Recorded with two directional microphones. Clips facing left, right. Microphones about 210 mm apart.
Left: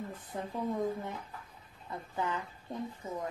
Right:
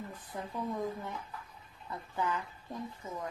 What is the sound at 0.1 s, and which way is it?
Speech, 25° left (ahead or behind).